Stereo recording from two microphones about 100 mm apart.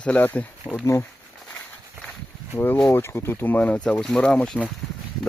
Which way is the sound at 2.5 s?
20° left (ahead or behind).